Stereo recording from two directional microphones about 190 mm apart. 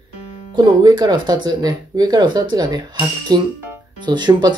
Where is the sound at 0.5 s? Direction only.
20° right (ahead or behind).